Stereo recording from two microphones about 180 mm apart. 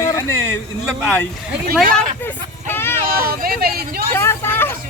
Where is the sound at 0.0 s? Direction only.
20° left (ahead or behind).